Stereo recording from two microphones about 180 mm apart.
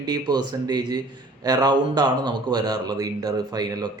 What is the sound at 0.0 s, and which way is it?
A man's voice, 25° right (ahead or behind).